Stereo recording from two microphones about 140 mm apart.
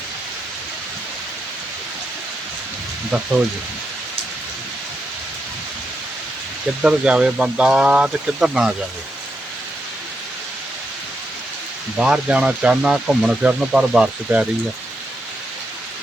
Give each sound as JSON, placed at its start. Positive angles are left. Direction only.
{"t": 6.8, "sound": "speech", "side_deg": -5}
{"t": 11.9, "sound": "speech", "side_deg": -5}